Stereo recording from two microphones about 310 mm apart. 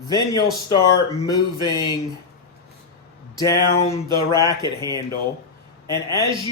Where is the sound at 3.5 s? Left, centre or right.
Left.